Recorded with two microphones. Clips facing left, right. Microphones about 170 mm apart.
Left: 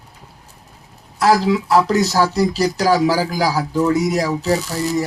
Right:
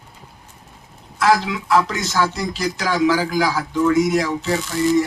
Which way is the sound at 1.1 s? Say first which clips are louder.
Left 3 dB; 40° left (ahead or behind).